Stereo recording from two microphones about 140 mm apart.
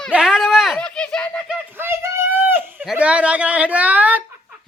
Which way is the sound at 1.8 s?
15° right (ahead or behind).